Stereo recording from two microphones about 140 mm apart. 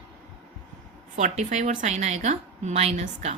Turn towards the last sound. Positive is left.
turn(degrees=-50)  # may be behind; listen again after turning